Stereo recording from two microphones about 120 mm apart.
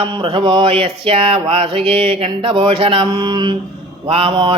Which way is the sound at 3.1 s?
35° right (ahead or behind).